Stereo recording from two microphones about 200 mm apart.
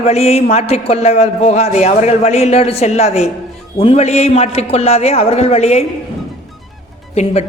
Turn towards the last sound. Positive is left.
turn(degrees=30)  # may be behind; listen again after turning